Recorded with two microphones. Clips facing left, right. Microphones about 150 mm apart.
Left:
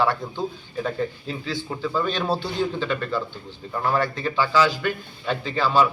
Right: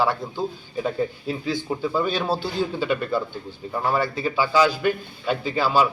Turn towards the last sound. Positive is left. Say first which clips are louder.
# even
turn(degrees=-5)  # may be behind; listen again after turning